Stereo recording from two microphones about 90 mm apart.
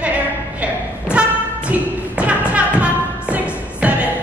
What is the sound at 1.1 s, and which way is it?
Thump, 15° right (ahead or behind).